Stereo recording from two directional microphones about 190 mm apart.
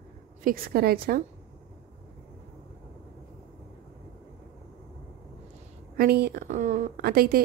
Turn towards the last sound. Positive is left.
turn(degrees=-50)  # may be behind; listen again after turning